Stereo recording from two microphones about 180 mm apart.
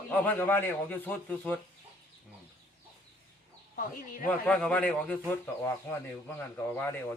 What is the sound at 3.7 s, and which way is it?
Speech, 50° left (ahead or behind).